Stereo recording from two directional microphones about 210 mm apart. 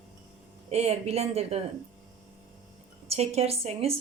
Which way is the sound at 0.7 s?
30° right (ahead or behind).